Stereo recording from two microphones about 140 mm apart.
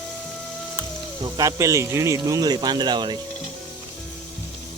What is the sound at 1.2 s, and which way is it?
Speech, 25° right (ahead or behind).